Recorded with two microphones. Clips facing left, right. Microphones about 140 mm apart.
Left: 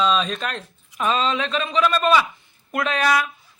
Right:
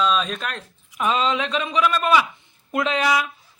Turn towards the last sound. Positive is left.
turn(degrees=-20)  # may be behind; listen again after turning